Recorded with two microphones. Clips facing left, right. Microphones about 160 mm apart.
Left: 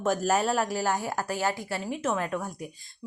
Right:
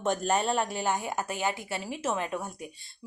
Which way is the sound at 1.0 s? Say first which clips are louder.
Left 2 dB; 20° right (ahead or behind).